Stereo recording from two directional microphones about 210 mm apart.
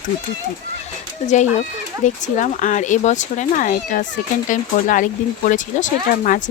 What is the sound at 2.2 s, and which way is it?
A woman's voice, 35° left (ahead or behind).